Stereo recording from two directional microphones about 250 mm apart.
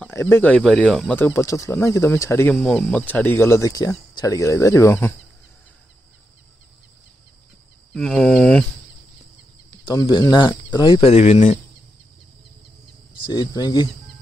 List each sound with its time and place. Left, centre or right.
0.0 s speech: centre
7.9 s cricket: centre
9.8 s speech: centre
13.2 s speech: centre